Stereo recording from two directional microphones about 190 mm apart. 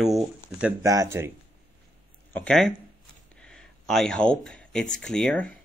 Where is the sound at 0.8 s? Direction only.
20° right (ahead or behind).